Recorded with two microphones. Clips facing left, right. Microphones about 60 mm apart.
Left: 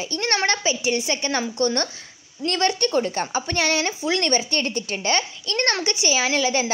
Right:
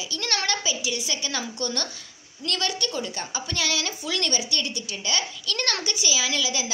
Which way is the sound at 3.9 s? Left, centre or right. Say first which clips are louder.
Left 7 dB; left.